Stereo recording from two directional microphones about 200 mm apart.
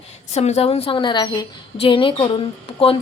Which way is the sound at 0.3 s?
35° left (ahead or behind).